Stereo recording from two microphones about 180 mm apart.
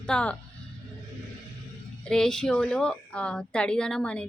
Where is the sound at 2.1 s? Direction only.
5° left (ahead or behind).